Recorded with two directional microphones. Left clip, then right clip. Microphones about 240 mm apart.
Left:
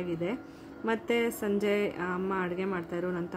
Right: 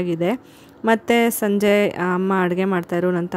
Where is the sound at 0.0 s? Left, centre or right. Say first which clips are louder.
Right 12 dB; right.